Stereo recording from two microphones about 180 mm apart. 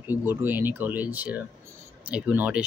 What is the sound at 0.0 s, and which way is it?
Speech, 10° right (ahead or behind).